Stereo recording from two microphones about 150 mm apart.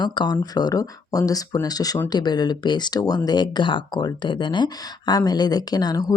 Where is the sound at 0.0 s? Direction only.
30° left (ahead or behind).